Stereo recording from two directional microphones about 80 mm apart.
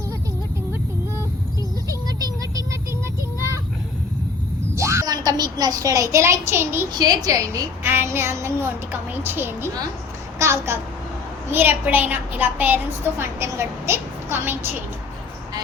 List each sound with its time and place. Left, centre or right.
1.9 s vehicle: right
4.7 s a sound: right
5.0 s a child's voice: right
6.9 s a child's voice: right
7.9 s a woman's voice: right
11.5 s a woman's voice: right